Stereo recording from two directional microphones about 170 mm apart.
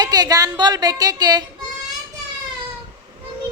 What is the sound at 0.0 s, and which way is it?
A man's voice, 25° right (ahead or behind).